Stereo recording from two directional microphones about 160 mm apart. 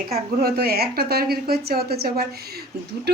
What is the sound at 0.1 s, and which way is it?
A woman's voice, 80° right.